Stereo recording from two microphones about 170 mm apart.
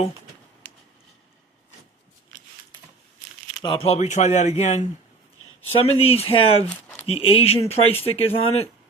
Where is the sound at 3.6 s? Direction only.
30° left (ahead or behind).